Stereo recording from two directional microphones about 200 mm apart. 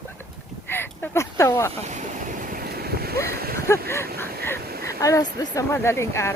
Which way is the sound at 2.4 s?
45° right (ahead or behind).